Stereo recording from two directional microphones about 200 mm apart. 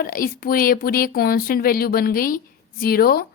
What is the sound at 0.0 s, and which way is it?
A woman's voice, 45° left (ahead or behind).